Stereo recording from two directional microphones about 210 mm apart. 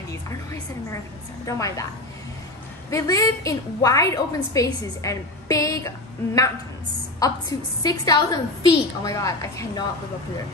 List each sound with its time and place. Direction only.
1.4 s a woman's voice: 15° left (ahead or behind)
2.9 s a woman's voice: 15° left (ahead or behind)